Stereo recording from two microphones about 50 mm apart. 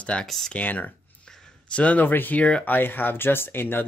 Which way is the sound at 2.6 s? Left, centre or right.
Left.